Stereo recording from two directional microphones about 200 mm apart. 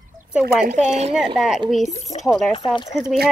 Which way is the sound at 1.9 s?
35° left (ahead or behind).